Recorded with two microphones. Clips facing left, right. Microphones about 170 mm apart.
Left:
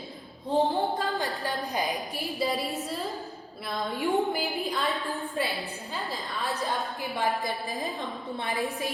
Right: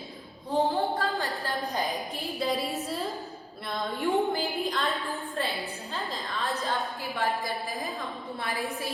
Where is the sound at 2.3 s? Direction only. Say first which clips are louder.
Even; centre (ahead or behind).